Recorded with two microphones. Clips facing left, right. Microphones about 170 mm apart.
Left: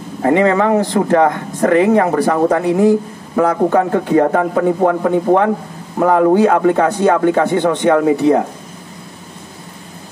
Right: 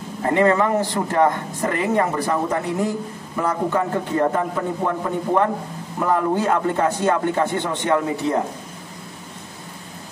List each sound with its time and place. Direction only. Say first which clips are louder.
0.2 s speech: left 5 dB; 70° left (ahead or behind)